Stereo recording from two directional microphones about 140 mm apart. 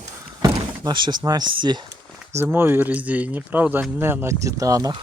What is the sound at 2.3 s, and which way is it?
Speech, 15° right (ahead or behind).